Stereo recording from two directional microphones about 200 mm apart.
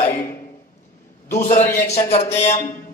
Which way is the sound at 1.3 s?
40° left (ahead or behind).